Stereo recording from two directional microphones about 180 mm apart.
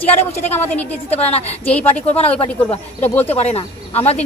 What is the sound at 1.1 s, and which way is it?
Speech, 35° left (ahead or behind).